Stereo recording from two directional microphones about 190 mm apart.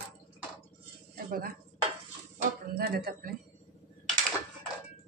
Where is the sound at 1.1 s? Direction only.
50° right (ahead or behind).